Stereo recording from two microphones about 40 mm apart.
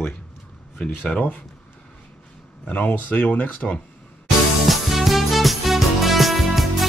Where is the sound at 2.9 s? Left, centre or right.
Left.